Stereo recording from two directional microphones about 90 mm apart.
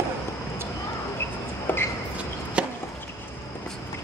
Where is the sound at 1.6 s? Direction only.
25° left (ahead or behind).